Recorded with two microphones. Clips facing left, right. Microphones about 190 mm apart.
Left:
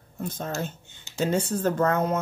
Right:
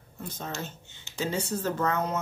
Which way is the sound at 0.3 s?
55° left (ahead or behind).